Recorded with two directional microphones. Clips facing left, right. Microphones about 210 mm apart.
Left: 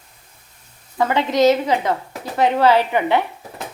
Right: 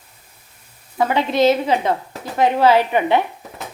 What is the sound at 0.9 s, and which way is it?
Speech, 10° right (ahead or behind).